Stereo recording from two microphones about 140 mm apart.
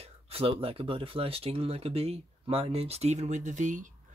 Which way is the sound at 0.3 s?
40° right (ahead or behind).